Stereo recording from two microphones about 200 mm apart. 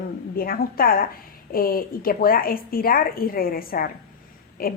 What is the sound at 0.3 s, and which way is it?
A woman's voice, 50° left (ahead or behind).